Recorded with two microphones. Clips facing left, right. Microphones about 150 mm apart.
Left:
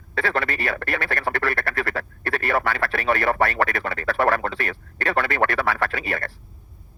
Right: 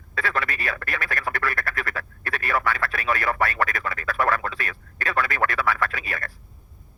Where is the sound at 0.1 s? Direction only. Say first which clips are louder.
Left 3 dB; 30° left (ahead or behind).